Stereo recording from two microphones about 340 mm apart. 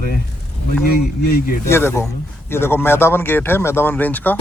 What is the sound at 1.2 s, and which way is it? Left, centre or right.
Speech, left.